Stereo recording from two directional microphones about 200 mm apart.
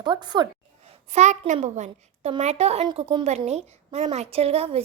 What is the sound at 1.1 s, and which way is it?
A child's voice, 35° right (ahead or behind).